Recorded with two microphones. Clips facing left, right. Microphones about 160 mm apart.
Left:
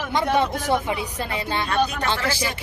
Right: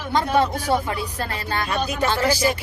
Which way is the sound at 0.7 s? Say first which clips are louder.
Even; 20° left (ahead or behind).